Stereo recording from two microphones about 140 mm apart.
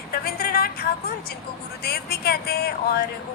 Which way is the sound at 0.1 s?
90° left.